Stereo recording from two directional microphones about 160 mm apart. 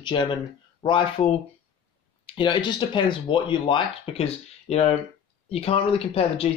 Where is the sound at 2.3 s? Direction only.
30° left (ahead or behind).